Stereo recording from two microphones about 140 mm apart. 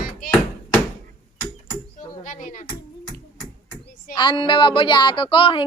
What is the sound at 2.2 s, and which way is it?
Speech, 65° left (ahead or behind).